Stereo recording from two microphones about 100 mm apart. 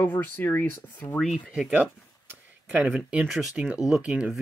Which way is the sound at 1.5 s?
10° right (ahead or behind).